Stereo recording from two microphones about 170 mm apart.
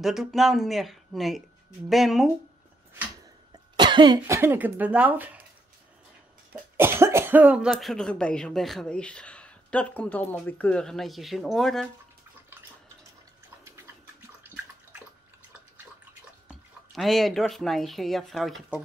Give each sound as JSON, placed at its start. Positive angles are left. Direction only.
{"t": 0.0, "sound": "speech", "side_deg": 0}
{"t": 3.7, "sound": "cough", "side_deg": -25}
{"t": 4.4, "sound": "speech", "side_deg": -10}
{"t": 6.8, "sound": "speech", "side_deg": -15}
{"t": 16.4, "sound": "speech", "side_deg": 0}